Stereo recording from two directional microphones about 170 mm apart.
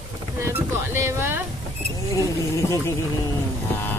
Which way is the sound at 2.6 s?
20° left (ahead or behind).